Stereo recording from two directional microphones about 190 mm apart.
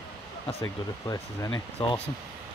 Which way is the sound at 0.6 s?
15° left (ahead or behind).